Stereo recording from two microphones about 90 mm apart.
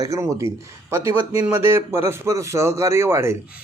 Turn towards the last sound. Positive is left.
turn(degrees=-30)  # may be behind; listen again after turning